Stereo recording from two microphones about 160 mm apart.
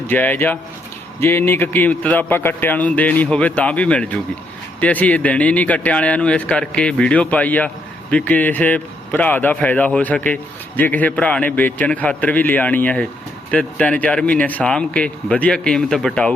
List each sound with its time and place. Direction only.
0.1 s a man's voice: 10° left (ahead or behind)